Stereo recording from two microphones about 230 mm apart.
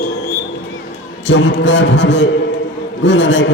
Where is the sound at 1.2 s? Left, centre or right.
Left.